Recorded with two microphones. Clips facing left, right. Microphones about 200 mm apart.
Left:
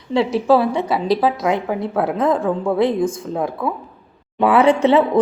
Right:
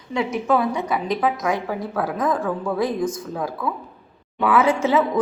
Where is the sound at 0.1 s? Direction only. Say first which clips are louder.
Left 6 dB; 30° left (ahead or behind).